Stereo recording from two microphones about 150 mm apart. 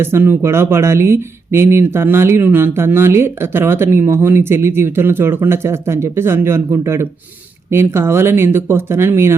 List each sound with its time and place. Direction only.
0.0 s speech: 15° right (ahead or behind)